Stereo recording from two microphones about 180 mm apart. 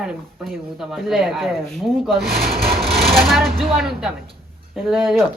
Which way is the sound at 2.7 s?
60° right (ahead or behind).